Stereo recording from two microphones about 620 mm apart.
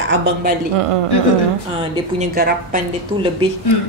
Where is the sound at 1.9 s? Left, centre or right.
Centre.